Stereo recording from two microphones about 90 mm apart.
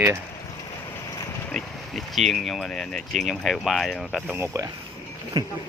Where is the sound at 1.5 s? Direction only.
5° left (ahead or behind).